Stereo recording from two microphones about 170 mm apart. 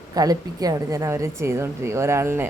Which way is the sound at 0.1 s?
20° right (ahead or behind).